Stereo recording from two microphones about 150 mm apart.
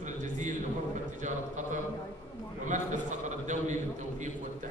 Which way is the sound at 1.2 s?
55° right (ahead or behind).